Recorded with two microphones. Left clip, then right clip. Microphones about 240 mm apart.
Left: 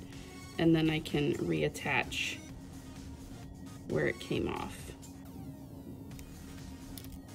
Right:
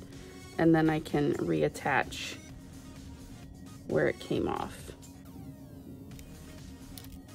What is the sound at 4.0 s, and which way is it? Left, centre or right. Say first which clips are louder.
Speech: right 4 dB; centre.